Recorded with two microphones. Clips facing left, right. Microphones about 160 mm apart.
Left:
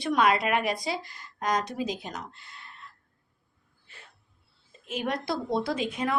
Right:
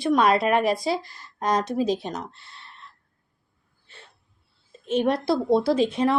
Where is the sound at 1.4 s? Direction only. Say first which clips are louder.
Right 5 dB; 30° right (ahead or behind).